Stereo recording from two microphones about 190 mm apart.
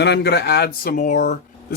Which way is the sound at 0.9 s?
45° left (ahead or behind).